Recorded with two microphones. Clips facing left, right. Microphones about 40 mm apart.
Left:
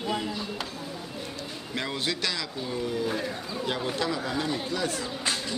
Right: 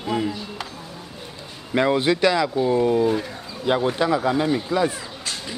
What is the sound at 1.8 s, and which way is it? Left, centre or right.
Speech, right.